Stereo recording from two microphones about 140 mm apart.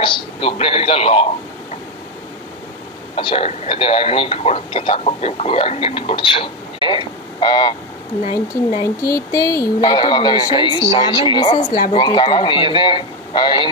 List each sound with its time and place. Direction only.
0.0 s a man's voice: 35° left (ahead or behind)
3.2 s speech: 40° left (ahead or behind)
8.8 s speech: 25° left (ahead or behind)
9.8 s speech: 35° left (ahead or behind)